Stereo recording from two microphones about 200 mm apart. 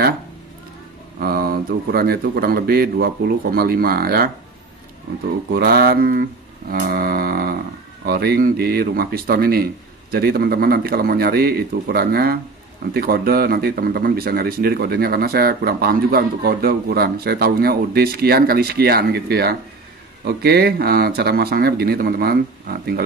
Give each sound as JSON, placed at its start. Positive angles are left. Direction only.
{"t": 1.2, "sound": "speech", "side_deg": -50}
{"t": 5.5, "sound": "speech", "side_deg": -50}